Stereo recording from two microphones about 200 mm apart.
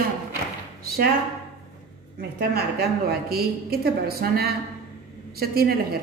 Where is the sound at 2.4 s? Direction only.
50° right (ahead or behind).